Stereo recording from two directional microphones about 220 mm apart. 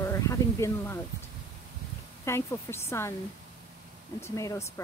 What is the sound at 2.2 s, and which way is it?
Speech, 10° left (ahead or behind).